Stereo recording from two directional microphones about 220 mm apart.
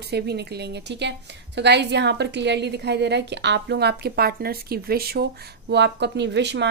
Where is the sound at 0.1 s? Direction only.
50° right (ahead or behind).